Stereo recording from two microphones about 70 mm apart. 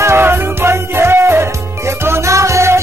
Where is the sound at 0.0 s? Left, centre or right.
Right.